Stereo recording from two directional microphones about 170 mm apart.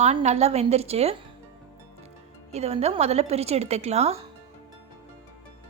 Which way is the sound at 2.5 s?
40° right (ahead or behind).